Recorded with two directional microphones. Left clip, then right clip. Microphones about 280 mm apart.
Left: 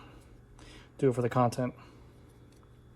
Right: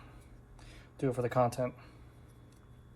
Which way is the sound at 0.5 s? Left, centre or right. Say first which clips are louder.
Left 4 dB; left.